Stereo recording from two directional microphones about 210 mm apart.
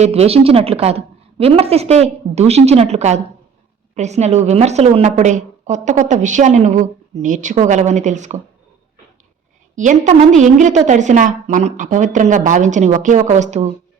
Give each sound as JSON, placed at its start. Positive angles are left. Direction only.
{"t": 0.0, "sound": "a woman's voice", "side_deg": -30}
{"t": 9.7, "sound": "a woman's voice", "side_deg": -35}